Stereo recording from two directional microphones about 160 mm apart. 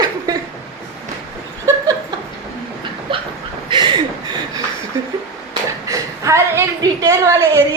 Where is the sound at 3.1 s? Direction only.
30° right (ahead or behind).